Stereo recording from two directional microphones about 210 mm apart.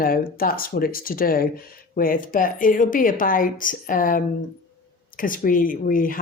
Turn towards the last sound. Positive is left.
turn(degrees=40)  # may be behind; listen again after turning